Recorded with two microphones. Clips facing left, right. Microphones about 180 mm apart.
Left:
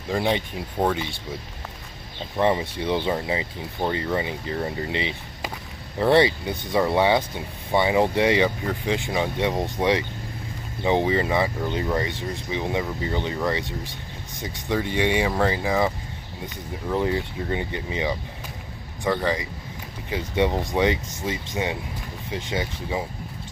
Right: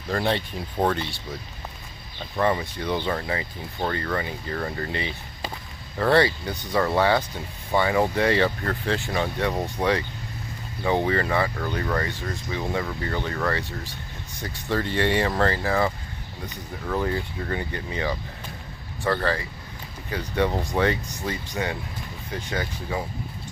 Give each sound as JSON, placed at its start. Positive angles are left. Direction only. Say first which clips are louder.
{"t": 0.1, "sound": "speech", "louder": "left 1 dB", "side_deg": 10}
{"t": 2.3, "sound": "speech", "louder": "left 2 dB", "side_deg": 20}